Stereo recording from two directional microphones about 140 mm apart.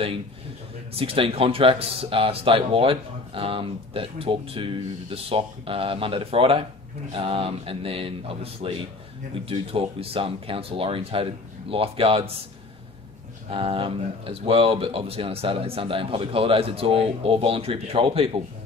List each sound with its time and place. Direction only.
0.9 s speech: 40° right (ahead or behind)
13.5 s speech: 40° right (ahead or behind)